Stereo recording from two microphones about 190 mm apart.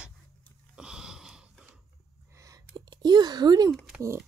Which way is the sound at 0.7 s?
5° right (ahead or behind).